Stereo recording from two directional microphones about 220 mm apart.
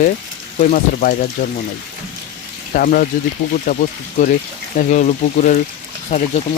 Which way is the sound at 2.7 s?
40° left (ahead or behind).